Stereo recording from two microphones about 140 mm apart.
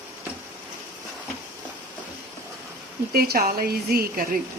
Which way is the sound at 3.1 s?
90° right.